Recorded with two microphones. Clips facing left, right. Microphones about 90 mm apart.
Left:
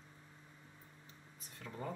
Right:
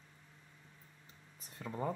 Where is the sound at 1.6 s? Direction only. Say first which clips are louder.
Right 6 dB; 25° right (ahead or behind).